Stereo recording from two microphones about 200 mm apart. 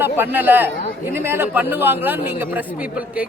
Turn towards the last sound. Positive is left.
turn(degrees=-10)  # may be behind; listen again after turning